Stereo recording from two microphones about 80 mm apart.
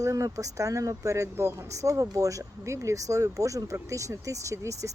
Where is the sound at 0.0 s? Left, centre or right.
Right.